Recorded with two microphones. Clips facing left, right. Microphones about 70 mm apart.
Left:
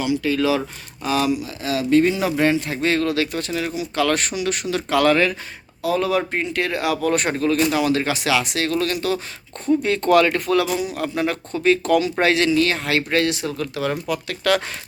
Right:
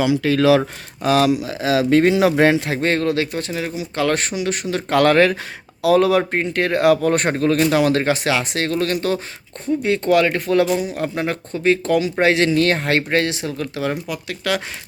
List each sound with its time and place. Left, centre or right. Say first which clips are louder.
0.2 s speech: right 5 dB; right
2.8 s speech: even; right
4.9 s speech: right 3 dB; right
5.8 s speech: right 6 dB; right
6.3 s speech: right 4 dB; right
7.7 s speech: right 3 dB; right
8.1 s speech: right 1 dB; right
10.1 s speech: left 1 dB; centre
12.5 s speech: right 2 dB; right; by 14.6 s centre